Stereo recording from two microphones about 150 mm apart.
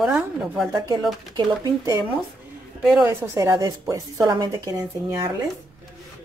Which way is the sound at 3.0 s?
20° right (ahead or behind).